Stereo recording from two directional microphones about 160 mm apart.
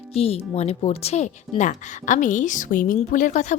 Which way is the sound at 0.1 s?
35° left (ahead or behind).